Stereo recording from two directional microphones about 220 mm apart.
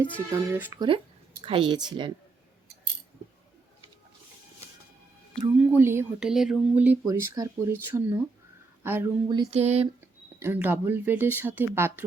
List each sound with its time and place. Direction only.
0.3 s speech: 10° right (ahead or behind)
5.3 s speech: 5° right (ahead or behind); by 9.8 s 30° right (ahead or behind)
10.4 s speech: 10° right (ahead or behind)